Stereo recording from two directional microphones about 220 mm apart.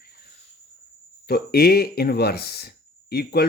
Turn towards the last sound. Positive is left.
turn(degrees=45)  # may be behind; listen again after turning